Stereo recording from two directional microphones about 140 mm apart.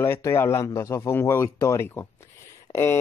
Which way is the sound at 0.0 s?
20° left (ahead or behind).